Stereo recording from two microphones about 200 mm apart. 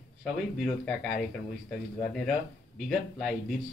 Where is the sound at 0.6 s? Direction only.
Centre (ahead or behind).